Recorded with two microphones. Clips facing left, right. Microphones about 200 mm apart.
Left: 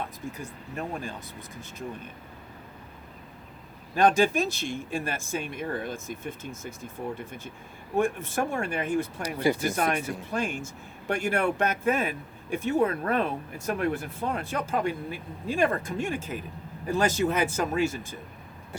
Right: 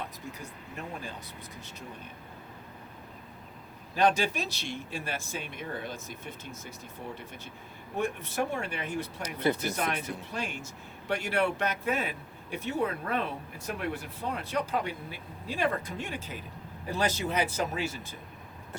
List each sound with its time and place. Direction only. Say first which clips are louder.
3.9 s speech: left 5 dB; 50° left (ahead or behind)
9.4 s speech: left 3 dB; 10° left (ahead or behind)
9.6 s speech: left 5 dB; 50° left (ahead or behind)